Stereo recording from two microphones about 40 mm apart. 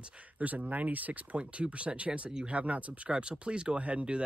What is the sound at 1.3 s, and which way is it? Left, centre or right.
Speech, right.